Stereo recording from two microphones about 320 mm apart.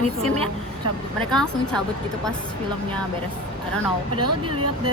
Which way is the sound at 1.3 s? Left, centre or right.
Centre.